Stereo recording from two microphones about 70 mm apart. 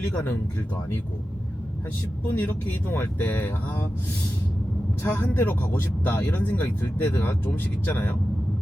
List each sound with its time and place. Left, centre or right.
2.3 s speech: left
5.1 s speech: left